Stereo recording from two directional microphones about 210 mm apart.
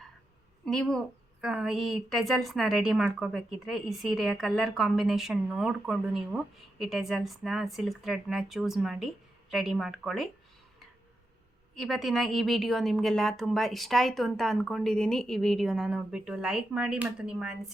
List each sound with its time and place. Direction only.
0.6 s a woman's voice: centre (ahead or behind)
11.7 s a woman's voice: centre (ahead or behind)